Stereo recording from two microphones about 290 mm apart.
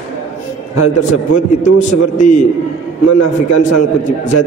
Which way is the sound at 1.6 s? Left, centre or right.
Left.